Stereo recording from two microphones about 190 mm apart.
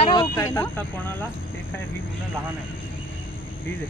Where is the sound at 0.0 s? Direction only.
30° left (ahead or behind).